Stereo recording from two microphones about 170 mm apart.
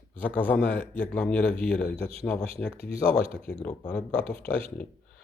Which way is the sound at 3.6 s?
5° left (ahead or behind).